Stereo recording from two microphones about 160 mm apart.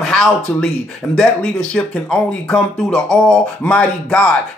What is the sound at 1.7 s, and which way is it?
Speech, 5° left (ahead or behind).